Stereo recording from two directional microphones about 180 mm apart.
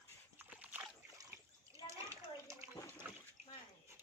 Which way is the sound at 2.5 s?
15° right (ahead or behind).